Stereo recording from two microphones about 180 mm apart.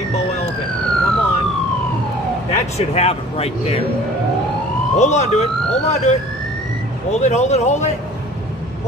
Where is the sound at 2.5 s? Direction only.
35° left (ahead or behind).